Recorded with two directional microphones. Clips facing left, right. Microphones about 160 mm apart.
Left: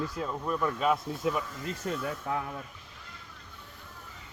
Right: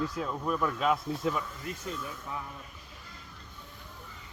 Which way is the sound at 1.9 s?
70° left (ahead or behind).